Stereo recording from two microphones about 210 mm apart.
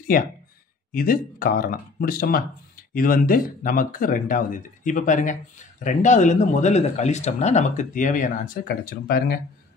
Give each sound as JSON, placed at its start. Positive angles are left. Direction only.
{"t": 0.0, "sound": "speech", "side_deg": 40}